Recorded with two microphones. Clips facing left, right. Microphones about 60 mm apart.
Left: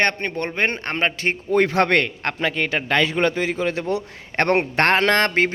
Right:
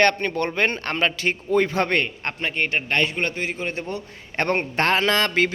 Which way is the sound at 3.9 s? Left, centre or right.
Left.